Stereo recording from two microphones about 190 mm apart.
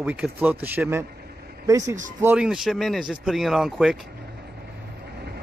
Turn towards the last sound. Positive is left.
turn(degrees=0)  # may be behind; listen again after turning